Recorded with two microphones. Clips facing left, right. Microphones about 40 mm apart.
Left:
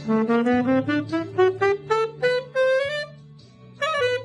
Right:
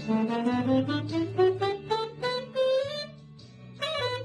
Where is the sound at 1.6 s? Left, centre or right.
Left.